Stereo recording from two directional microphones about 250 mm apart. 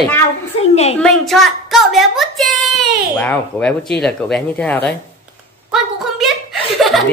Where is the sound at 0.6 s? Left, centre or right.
Left.